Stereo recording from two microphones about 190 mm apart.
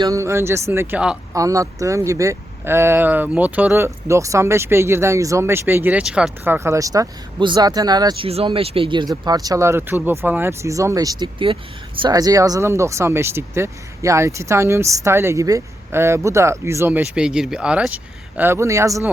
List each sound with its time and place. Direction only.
0.0 s speech: 15° right (ahead or behind)
1.3 s speech: 15° right (ahead or behind)